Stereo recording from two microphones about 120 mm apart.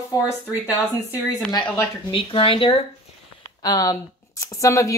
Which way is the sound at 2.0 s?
45° left (ahead or behind).